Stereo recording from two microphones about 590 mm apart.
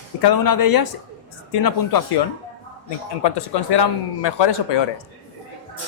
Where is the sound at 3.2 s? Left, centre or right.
Left.